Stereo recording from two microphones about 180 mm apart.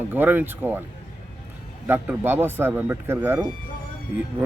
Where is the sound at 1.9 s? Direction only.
10° right (ahead or behind).